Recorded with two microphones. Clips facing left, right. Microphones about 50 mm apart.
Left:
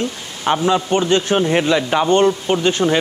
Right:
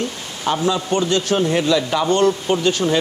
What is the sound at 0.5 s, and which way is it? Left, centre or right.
A man's voice, left.